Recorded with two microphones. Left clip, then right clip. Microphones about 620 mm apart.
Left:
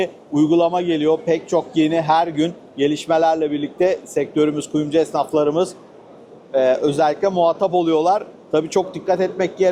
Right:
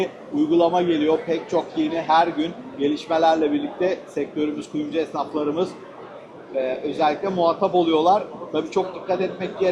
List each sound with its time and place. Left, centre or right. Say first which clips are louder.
0.0 s a man's voice: left 4 dB; left